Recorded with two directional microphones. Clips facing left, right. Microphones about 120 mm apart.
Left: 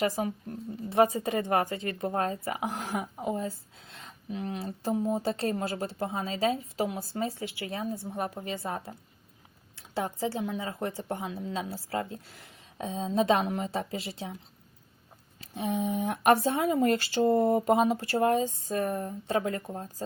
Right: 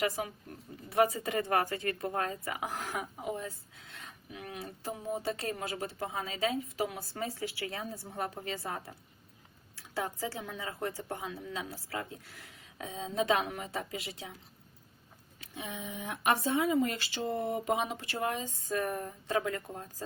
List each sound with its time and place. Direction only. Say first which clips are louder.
0.0 s speech: left 4 dB; 30° left (ahead or behind)
15.4 s speech: left 11 dB; 35° left (ahead or behind)
18.4 s speech: left 4 dB; 30° left (ahead or behind)